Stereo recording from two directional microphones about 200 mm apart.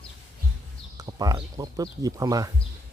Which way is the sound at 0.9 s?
20° right (ahead or behind).